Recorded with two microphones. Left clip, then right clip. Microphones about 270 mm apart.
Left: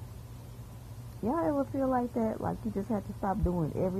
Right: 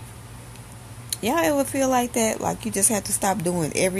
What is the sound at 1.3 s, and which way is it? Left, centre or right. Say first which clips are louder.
Speech: right 9 dB; centre.